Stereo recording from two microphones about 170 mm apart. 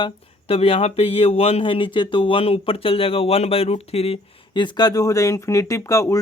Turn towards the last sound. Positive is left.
turn(degrees=20)  # may be behind; listen again after turning